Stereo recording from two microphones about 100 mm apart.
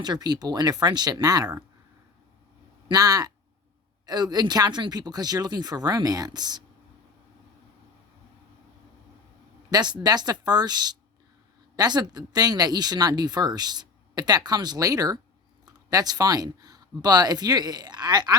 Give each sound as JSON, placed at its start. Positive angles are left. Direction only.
{"t": 0.0, "sound": "speech", "side_deg": -45}
{"t": 2.9, "sound": "speech", "side_deg": -40}
{"t": 9.6, "sound": "speech", "side_deg": -45}